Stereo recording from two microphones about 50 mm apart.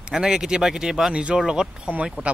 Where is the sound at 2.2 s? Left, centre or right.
Right.